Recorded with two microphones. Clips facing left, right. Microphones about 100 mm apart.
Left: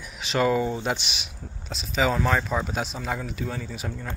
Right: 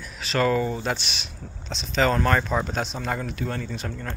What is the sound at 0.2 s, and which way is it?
Speech, 15° left (ahead or behind).